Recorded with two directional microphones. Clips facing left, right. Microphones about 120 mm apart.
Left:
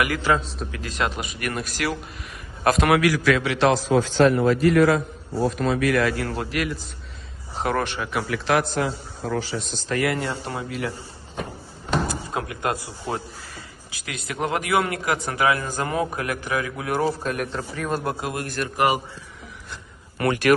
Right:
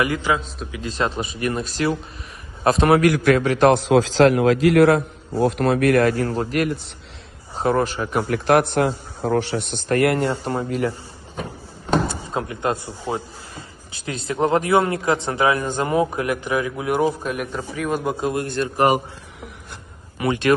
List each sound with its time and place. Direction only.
0.0 s speech: 20° right (ahead or behind)
3.0 s a man's voice: 50° right (ahead or behind)
3.8 s a man's voice: 85° right; by 6.1 s 55° right (ahead or behind)
6.1 s a man's voice: 35° right (ahead or behind)
7.6 s a man's voice: 35° right (ahead or behind); by 10.3 s 55° right (ahead or behind)
10.4 s a man's voice: 40° right (ahead or behind)
12.4 s speech: 25° right (ahead or behind)
17.3 s a man's voice: centre (ahead or behind); by 18.9 s 25° right (ahead or behind)
20.2 s speech: 25° right (ahead or behind)